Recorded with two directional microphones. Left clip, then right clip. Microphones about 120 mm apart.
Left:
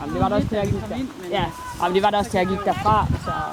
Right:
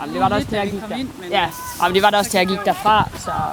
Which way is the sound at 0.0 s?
50° right (ahead or behind).